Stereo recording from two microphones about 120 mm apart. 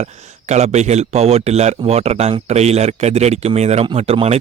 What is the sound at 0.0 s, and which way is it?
A man's voice, 65° right (ahead or behind).